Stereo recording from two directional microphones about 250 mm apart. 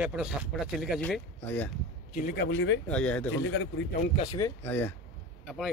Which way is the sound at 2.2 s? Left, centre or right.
Left.